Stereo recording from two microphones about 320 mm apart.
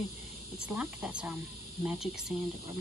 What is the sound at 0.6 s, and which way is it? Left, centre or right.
Speech, centre.